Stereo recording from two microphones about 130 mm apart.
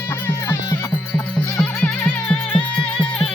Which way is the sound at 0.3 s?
20° left (ahead or behind).